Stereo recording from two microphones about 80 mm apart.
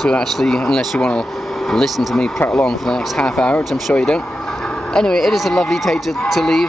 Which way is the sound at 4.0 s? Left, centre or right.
Centre.